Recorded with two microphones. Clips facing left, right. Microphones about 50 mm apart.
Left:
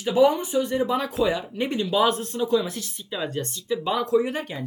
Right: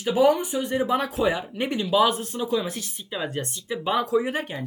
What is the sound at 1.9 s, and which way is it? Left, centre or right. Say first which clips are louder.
Speech: right 2 dB; centre.